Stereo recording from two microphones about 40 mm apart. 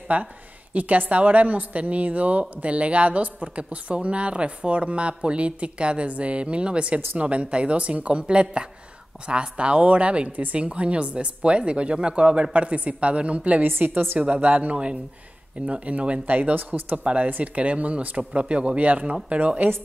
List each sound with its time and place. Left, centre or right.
0.1 s a woman's voice: right
13.7 s a woman's voice: right
13.9 s a woman's voice: right
16.9 s a woman's voice: right